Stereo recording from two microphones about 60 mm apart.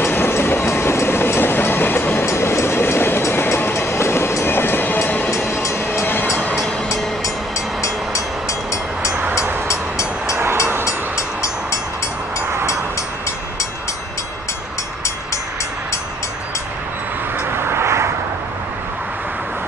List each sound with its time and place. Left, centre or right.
0.0 s vehicle: left
2.2 s train: left
5.5 s vehicle: left
5.9 s vehicle: left
7.8 s train: left
10.3 s vehicle: right
10.9 s train: left
17.5 s a sound: right